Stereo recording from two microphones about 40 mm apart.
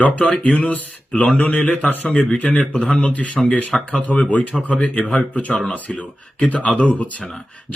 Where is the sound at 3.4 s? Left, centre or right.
Centre.